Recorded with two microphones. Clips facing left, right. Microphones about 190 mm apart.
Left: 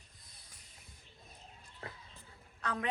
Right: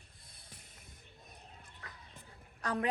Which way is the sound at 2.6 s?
35° right (ahead or behind).